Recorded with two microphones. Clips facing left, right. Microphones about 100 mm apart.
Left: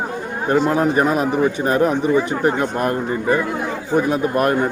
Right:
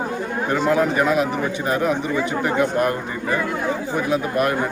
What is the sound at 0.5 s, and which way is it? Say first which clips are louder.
A man's voice: left 2 dB; 40° left (ahead or behind).